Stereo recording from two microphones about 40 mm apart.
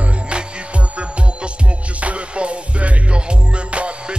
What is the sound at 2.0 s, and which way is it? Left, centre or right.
Music, right.